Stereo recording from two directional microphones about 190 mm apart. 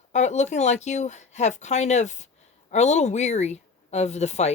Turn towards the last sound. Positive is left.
turn(degrees=35)  # may be behind; listen again after turning